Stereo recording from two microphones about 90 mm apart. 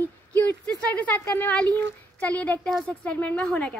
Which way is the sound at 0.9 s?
20° left (ahead or behind).